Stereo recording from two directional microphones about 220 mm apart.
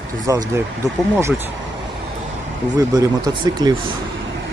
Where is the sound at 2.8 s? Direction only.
15° right (ahead or behind).